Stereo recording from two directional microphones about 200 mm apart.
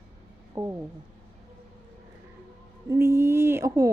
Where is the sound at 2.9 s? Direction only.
15° right (ahead or behind).